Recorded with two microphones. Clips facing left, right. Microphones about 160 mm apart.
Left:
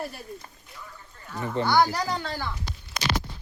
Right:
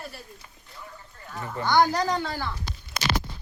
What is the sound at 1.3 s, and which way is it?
Speech, 20° left (ahead or behind).